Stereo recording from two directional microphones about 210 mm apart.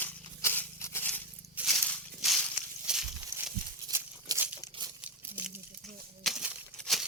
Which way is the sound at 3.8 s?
15° right (ahead or behind).